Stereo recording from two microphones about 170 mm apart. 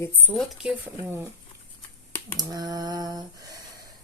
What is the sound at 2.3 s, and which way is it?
Speech, 25° right (ahead or behind).